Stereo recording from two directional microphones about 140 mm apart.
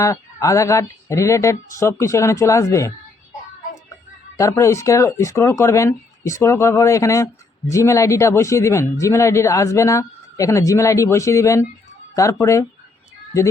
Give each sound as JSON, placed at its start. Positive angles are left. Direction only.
{"t": 0.0, "sound": "speech", "side_deg": 20}
{"t": 4.4, "sound": "speech", "side_deg": 20}